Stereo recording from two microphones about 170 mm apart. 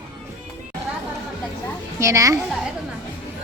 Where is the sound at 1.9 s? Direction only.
15° right (ahead or behind).